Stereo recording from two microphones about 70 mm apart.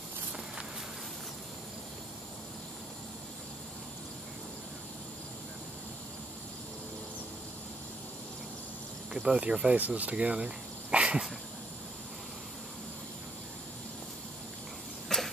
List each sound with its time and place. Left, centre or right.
9.1 s speech: centre
15.1 s cough: centre